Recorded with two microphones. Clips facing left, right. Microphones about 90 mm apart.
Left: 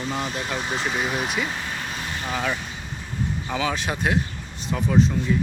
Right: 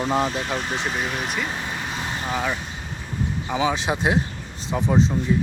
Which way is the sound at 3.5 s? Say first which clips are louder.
Right 4 dB; 25° right (ahead or behind).